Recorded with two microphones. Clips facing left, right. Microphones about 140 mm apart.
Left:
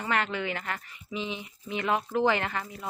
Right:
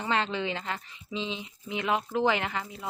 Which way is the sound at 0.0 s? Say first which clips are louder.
Right 1 dB; 20° right (ahead or behind).